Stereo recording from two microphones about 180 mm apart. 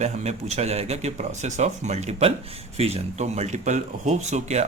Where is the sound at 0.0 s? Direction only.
40° right (ahead or behind).